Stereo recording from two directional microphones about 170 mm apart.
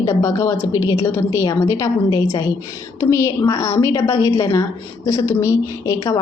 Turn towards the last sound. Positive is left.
turn(degrees=20)  # may be behind; listen again after turning